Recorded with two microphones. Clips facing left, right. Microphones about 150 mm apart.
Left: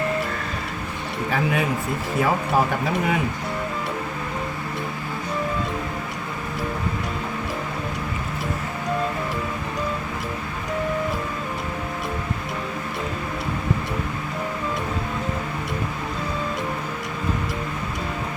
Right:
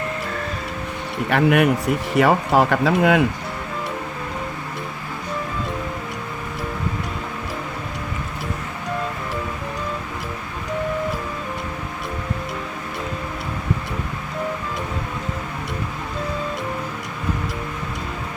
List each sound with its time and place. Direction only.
1.3 s speech: 70° right (ahead or behind); by 3.2 s 90° right